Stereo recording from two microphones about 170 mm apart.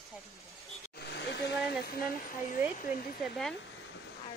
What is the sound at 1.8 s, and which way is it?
Speech, 60° left (ahead or behind).